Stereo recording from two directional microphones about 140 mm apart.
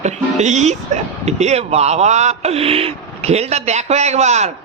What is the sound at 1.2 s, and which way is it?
Speech, 50° right (ahead or behind).